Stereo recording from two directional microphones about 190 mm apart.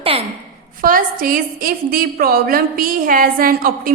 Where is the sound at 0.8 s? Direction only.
45° right (ahead or behind).